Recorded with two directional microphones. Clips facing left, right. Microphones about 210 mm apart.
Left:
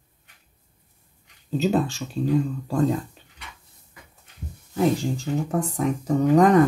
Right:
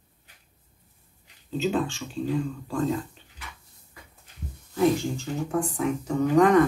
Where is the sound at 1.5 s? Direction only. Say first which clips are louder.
Left 4 dB; 40° left (ahead or behind).